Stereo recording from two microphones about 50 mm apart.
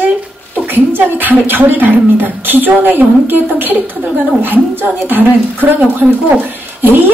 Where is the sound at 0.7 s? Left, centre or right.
Right.